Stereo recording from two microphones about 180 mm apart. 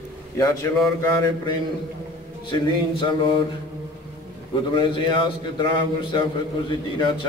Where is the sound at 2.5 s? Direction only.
30° left (ahead or behind).